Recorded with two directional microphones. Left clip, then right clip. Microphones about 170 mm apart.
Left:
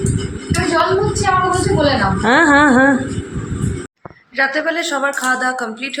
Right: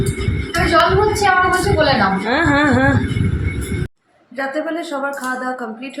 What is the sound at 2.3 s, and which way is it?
Speech, 25° left (ahead or behind).